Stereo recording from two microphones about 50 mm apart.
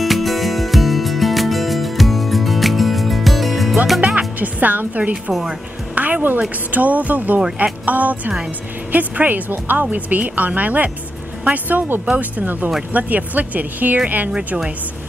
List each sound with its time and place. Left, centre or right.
0.0 s music: centre
4.0 s music: centre
4.4 s a woman's voice: right